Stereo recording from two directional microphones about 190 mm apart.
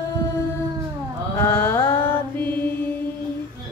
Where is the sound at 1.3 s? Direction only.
10° left (ahead or behind).